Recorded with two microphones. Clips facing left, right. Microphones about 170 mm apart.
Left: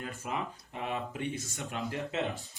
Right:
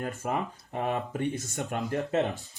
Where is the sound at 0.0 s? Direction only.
50° right (ahead or behind).